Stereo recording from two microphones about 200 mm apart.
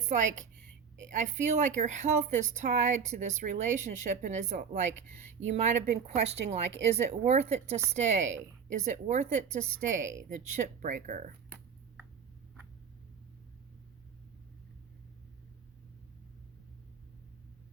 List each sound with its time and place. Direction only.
0.1 s speech: 35° right (ahead or behind)